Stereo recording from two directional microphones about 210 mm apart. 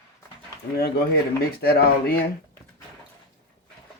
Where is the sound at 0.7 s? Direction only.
45° left (ahead or behind).